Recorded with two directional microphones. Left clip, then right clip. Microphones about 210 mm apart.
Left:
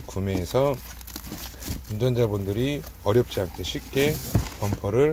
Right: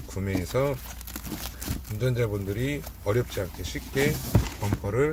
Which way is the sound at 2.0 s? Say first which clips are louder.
Left 4 dB; 30° left (ahead or behind).